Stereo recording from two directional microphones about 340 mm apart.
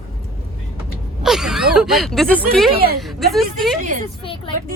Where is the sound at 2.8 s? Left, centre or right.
Right.